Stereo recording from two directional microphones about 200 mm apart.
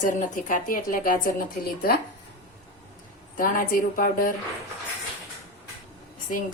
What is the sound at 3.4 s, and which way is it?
Speech, 45° left (ahead or behind).